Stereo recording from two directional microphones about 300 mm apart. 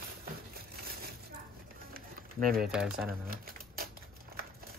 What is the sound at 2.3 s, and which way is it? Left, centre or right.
Speech, right.